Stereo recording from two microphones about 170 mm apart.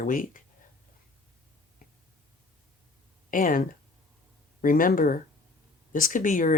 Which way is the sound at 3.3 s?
55° left (ahead or behind).